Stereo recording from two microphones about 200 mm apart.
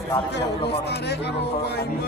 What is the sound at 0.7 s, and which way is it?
Speech, 55° left (ahead or behind).